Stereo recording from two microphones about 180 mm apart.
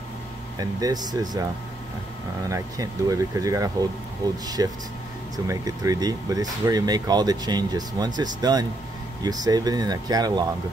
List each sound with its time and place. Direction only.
0.6 s speech: 20° right (ahead or behind)
2.5 s speech: 20° right (ahead or behind)